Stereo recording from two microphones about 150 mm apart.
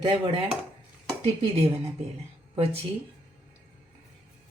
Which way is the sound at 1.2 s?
40° right (ahead or behind).